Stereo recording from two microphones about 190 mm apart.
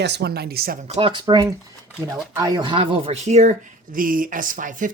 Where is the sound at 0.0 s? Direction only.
60° right (ahead or behind).